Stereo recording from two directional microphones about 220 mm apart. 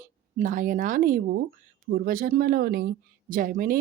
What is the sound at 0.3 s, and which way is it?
Speech, 35° right (ahead or behind).